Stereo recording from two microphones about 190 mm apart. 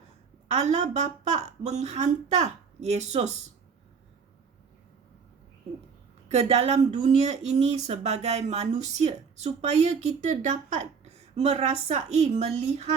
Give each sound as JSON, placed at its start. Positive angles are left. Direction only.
{"t": 0.5, "sound": "speech", "side_deg": -35}
{"t": 6.2, "sound": "speech", "side_deg": -35}